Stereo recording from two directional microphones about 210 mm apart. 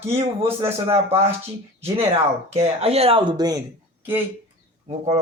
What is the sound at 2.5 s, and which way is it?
Speech, 30° right (ahead or behind).